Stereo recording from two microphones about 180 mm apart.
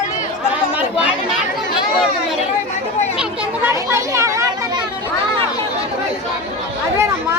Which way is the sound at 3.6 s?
15° right (ahead or behind).